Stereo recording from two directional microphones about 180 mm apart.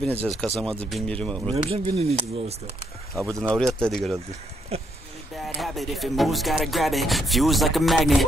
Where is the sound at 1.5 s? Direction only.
30° right (ahead or behind).